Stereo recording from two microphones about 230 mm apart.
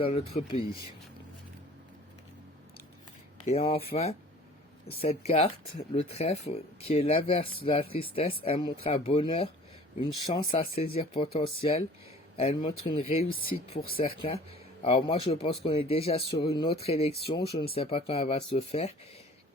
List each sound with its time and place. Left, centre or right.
0.0 s speech: left
3.4 s speech: left
4.9 s speech: left